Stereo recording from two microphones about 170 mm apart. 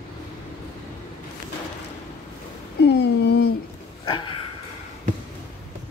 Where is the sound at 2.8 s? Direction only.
75° left (ahead or behind).